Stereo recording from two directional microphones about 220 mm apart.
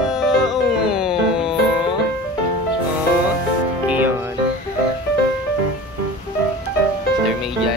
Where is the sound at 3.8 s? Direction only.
10° right (ahead or behind).